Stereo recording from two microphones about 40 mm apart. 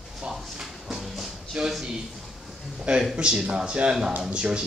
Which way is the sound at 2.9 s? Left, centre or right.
Right.